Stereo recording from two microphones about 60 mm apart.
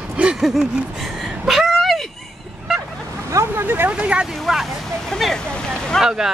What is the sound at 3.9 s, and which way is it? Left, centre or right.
Speech, right.